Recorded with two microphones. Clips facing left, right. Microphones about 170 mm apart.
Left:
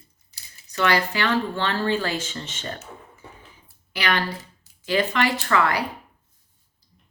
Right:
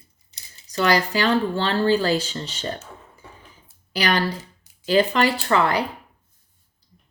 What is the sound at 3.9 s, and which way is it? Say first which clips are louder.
A woman's voice: right 3 dB; 35° right (ahead or behind).